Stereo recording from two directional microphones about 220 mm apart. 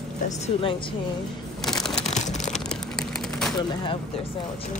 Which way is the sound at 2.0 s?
30° left (ahead or behind).